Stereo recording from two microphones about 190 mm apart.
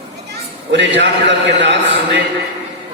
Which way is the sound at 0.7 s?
70° right (ahead or behind).